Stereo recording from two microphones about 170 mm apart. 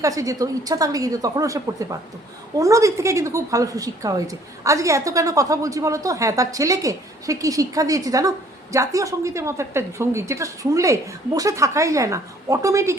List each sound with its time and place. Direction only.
0.0 s a woman's voice: 20° right (ahead or behind)